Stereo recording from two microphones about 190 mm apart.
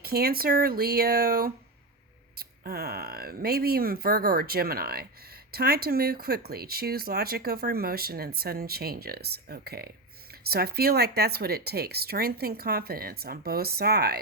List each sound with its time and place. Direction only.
0.0 s speech: 55° right (ahead or behind)